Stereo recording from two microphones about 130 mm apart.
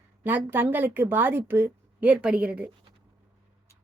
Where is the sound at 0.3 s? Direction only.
15° right (ahead or behind).